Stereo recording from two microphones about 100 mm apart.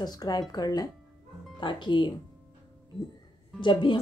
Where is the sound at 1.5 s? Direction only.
50° left (ahead or behind).